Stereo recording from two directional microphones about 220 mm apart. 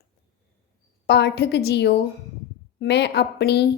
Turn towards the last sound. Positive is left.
turn(degrees=50)  # may be behind; listen again after turning